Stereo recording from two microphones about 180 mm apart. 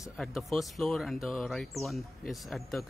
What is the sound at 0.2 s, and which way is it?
Speech, centre (ahead or behind).